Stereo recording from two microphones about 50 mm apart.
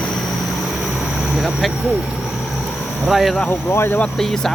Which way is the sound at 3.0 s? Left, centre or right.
Centre.